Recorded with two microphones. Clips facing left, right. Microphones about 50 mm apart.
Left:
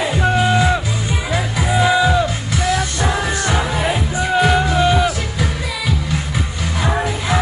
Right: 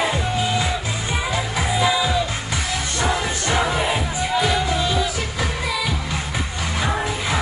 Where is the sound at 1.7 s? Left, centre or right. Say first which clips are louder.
Left 6 dB; left.